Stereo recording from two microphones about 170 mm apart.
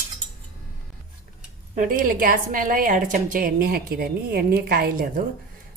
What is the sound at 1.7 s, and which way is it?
A woman's voice, 50° right (ahead or behind).